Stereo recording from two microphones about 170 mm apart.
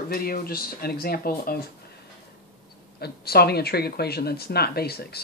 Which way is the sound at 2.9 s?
70° left (ahead or behind).